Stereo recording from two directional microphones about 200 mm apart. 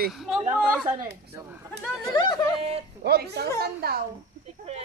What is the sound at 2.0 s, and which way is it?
Speech, 20° left (ahead or behind).